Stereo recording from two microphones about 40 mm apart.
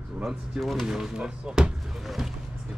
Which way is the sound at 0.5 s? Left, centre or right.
Centre.